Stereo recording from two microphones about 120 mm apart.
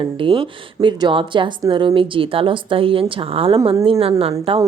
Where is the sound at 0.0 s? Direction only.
45° right (ahead or behind).